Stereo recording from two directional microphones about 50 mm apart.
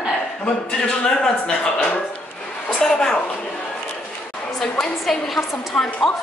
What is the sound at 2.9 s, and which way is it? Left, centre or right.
Speech, centre.